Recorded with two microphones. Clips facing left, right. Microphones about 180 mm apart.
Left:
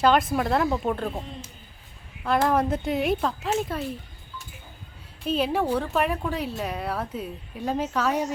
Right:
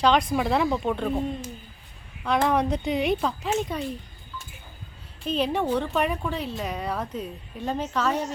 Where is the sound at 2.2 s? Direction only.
5° left (ahead or behind).